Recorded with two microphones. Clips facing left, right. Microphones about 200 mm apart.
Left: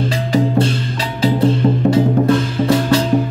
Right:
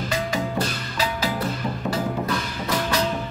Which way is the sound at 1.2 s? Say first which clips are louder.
Left 12 dB; 25° left (ahead or behind).